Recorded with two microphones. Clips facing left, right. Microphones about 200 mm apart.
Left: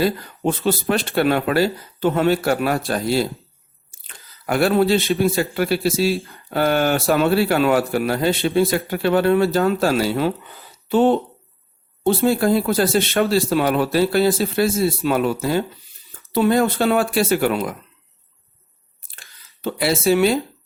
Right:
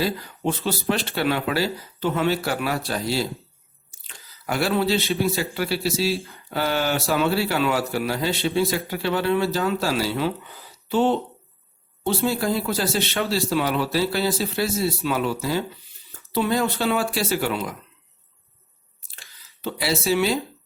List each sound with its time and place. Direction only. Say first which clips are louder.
0.0 s speech: left 5 dB; 50° left (ahead or behind)
4.0 s squish: left 3 dB; 55° left (ahead or behind)
5.2 s speech: left 5 dB; 50° left (ahead or behind)
19.0 s squish: left 1 dB; 50° left (ahead or behind)